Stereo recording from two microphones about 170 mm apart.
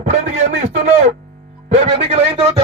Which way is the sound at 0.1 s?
40° right (ahead or behind).